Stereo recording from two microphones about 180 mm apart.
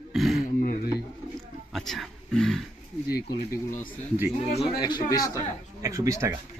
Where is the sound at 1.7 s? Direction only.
Centre (ahead or behind).